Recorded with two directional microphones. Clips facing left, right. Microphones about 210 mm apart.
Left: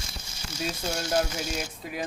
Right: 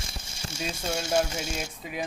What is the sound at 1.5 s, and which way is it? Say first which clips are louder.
Speech: left 1 dB; centre (ahead or behind).